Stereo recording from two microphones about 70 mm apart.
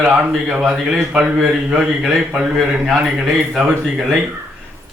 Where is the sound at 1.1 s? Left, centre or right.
Centre.